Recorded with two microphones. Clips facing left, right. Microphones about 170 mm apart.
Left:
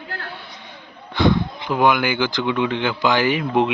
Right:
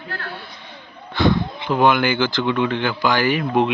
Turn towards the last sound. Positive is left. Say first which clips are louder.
# even
turn(degrees=20)  # may be behind; listen again after turning